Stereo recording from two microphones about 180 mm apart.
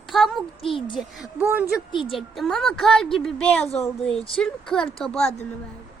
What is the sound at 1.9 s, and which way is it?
Speech, 25° left (ahead or behind).